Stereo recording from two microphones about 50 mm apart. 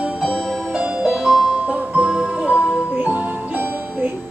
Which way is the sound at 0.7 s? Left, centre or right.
Right.